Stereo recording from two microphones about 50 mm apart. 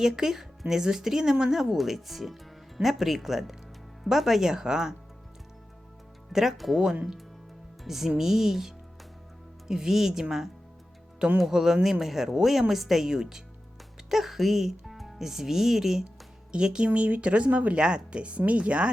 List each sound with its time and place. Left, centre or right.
0.0 s a woman's voice: centre
6.3 s a woman's voice: centre; by 18.9 s right